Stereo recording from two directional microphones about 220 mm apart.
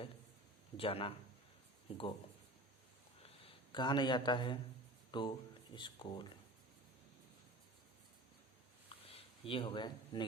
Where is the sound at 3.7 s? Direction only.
20° left (ahead or behind).